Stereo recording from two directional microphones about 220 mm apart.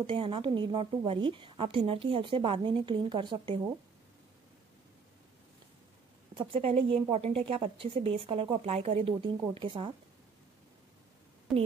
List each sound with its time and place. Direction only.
0.0 s a woman's voice: 25° right (ahead or behind)
6.3 s a woman's voice: 25° right (ahead or behind)
11.5 s a woman's voice: centre (ahead or behind)